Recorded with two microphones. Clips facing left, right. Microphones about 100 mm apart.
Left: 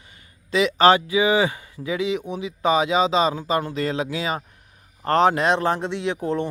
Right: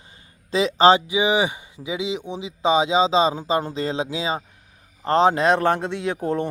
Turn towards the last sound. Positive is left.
turn(degrees=-45)  # may be behind; listen again after turning